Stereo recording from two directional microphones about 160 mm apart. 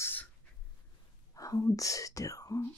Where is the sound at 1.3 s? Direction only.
20° left (ahead or behind).